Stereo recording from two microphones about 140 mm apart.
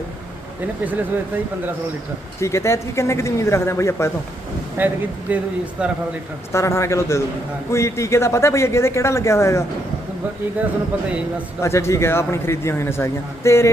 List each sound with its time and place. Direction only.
2.4 s a man's voice: 20° left (ahead or behind)
4.8 s speech: 15° right (ahead or behind)
6.5 s a man's voice: 20° left (ahead or behind)
11.6 s a man's voice: 20° left (ahead or behind)